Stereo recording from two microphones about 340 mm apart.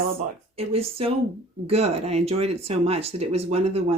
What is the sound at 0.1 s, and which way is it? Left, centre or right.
Speech, centre.